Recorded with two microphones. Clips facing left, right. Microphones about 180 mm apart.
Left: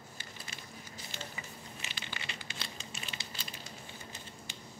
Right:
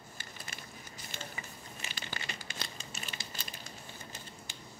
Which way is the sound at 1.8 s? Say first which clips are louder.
Right 4 dB; 45° right (ahead or behind).